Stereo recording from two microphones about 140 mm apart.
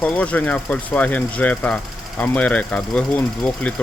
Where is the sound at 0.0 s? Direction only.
10° left (ahead or behind).